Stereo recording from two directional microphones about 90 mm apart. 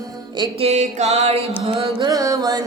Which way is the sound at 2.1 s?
40° right (ahead or behind).